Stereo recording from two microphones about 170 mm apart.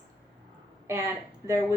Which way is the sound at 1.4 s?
15° right (ahead or behind).